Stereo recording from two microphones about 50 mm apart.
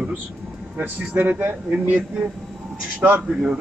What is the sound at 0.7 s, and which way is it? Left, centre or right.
Speech, right.